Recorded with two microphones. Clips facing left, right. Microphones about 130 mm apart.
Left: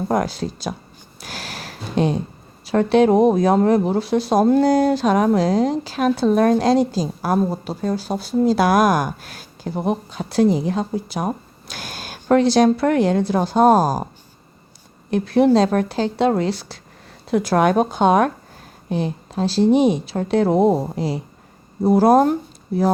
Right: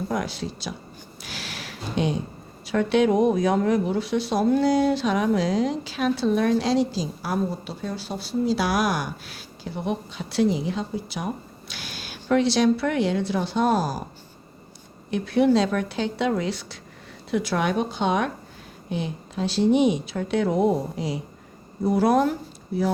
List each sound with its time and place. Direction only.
0.1 s speech: 45° left (ahead or behind)
1.2 s a sound: 40° left (ahead or behind)
2.6 s speech: 35° left (ahead or behind)
15.1 s speech: 35° left (ahead or behind)